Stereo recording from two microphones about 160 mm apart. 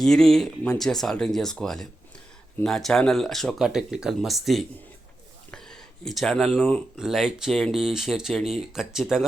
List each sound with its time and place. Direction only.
0.0 s speech: 5° left (ahead or behind)